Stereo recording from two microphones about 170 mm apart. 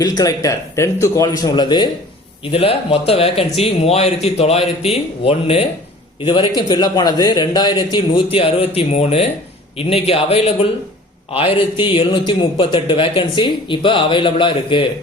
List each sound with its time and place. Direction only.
0.2 s a man's voice: 20° left (ahead or behind)